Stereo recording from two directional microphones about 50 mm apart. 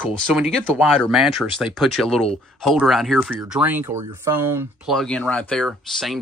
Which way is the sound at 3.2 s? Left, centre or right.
Centre.